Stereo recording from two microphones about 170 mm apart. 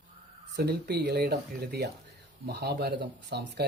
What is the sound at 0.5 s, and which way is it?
Speech, 70° right (ahead or behind).